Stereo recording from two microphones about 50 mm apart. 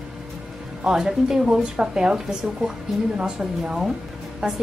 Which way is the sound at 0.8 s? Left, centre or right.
Centre.